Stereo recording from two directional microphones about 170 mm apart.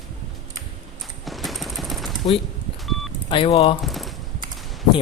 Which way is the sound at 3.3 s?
35° left (ahead or behind).